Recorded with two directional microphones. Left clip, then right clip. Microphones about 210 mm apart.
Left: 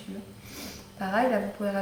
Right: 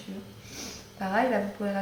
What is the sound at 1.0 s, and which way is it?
Speech, 5° left (ahead or behind).